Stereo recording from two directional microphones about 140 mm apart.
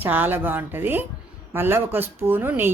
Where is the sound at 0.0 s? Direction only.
15° right (ahead or behind).